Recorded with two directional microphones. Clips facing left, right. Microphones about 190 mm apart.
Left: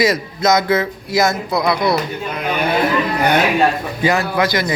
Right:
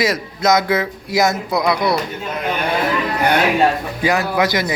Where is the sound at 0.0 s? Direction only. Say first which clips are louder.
Left 2 dB; 10° right (ahead or behind).